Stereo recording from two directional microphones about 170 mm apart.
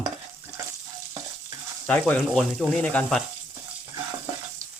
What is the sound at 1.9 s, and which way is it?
Speech, 10° left (ahead or behind).